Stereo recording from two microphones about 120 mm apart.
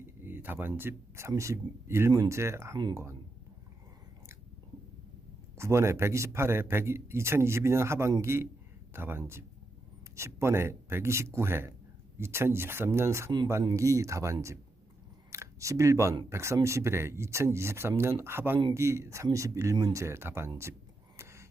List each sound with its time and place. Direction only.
0.0 s a man's voice: 15° right (ahead or behind)
5.5 s a man's voice: 25° right (ahead or behind)
21.2 s gasp: 25° right (ahead or behind)